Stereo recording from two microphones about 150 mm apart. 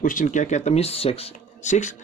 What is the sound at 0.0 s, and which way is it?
Speech, 60° left (ahead or behind).